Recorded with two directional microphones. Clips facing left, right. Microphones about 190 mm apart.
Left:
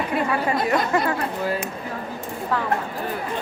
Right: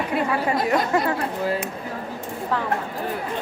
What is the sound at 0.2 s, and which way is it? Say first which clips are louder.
Speech: even; 20° right (ahead or behind).